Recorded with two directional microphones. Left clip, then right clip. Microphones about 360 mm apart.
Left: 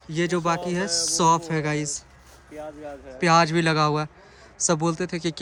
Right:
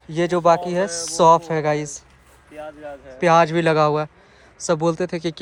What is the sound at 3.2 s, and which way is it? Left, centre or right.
Speech, centre.